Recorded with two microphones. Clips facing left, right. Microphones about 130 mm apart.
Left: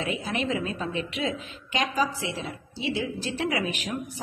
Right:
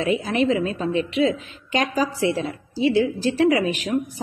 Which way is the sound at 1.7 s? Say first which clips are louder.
Right 4 dB; 45° right (ahead or behind).